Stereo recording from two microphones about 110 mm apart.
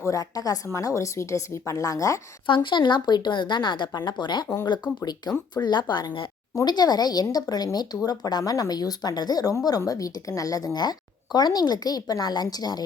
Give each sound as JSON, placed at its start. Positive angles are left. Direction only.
{"t": 0.0, "sound": "a woman's voice", "side_deg": 30}
{"t": 2.6, "sound": "a woman's voice", "side_deg": 45}